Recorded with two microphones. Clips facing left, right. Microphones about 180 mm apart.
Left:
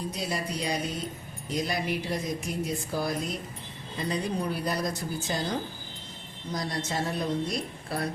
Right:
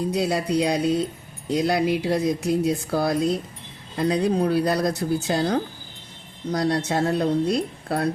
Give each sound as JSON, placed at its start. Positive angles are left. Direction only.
{"t": 0.2, "sound": "speech", "side_deg": -70}